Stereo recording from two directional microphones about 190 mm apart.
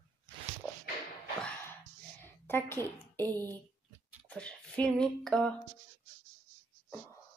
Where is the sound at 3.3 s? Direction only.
20° right (ahead or behind).